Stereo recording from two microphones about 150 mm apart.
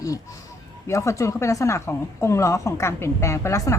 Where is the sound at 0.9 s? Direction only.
20° left (ahead or behind).